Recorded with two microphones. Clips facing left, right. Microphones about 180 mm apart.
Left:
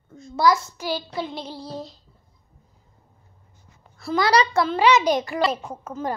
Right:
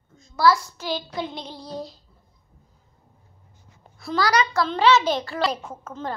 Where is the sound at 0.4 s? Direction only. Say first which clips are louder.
Even; 20° left (ahead or behind).